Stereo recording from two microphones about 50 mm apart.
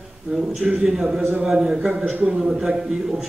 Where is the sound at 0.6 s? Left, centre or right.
Centre.